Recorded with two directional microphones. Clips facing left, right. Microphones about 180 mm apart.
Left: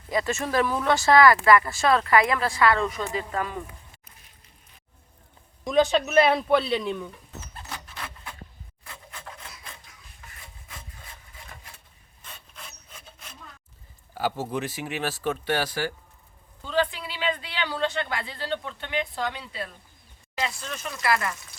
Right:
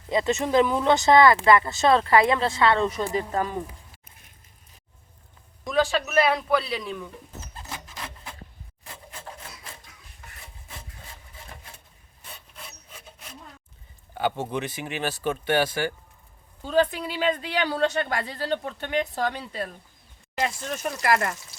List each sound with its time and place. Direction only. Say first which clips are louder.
0.1 s speech: right 4 dB; 20° right (ahead or behind)
3.3 s speech: right 2 dB; 35° right (ahead or behind)
5.6 s a man's voice: left 3 dB; 20° left (ahead or behind)
14.1 s speech: right 1 dB; 5° left (ahead or behind)
16.6 s speech: right 4 dB; 45° right (ahead or behind)